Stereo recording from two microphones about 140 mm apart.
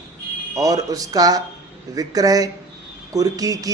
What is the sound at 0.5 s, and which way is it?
Speech, 25° right (ahead or behind).